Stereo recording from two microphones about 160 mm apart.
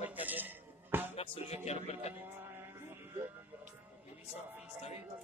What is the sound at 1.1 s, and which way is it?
Music, 35° left (ahead or behind).